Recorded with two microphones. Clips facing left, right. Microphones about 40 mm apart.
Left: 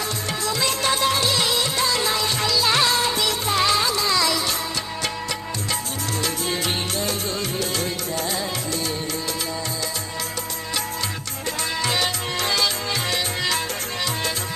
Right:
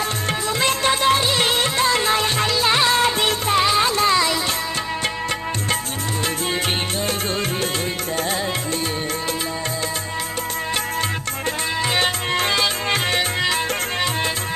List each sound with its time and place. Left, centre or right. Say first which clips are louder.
0.4 s music: right 3 dB; right
11.9 s music: right 4 dB; right